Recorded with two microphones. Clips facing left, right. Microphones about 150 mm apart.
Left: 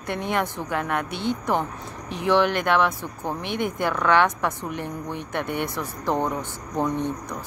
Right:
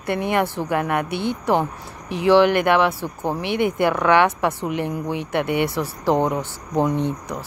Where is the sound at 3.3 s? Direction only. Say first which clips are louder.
Right 6 dB; 65° right (ahead or behind).